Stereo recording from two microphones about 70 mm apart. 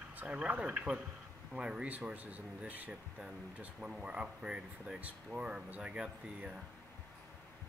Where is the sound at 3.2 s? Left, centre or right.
Centre.